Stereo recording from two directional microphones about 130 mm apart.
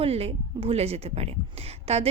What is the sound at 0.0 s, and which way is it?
Speech, 50° right (ahead or behind).